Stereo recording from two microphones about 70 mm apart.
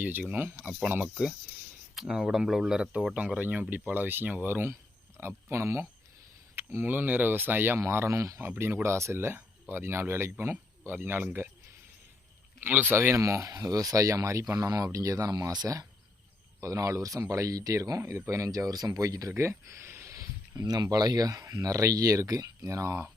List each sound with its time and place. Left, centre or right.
0.0 s speech: right
1.0 s speech: centre
3.2 s speech: centre
4.7 s speech: right
8.4 s speech: right
12.5 s speech: right
13.0 s speech: right
16.6 s speech: right
19.4 s a sound: right
20.6 s speech: right